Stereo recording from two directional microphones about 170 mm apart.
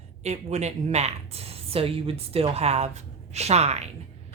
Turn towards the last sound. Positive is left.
turn(degrees=-40)  # may be behind; listen again after turning